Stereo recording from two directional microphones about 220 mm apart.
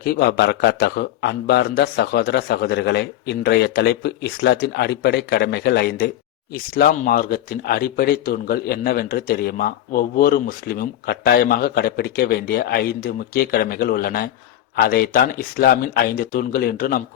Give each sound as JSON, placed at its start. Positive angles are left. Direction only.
{"t": 0.0, "sound": "speech", "side_deg": 45}